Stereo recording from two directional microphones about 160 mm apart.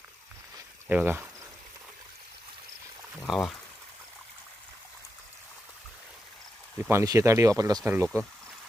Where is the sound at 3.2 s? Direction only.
Centre (ahead or behind).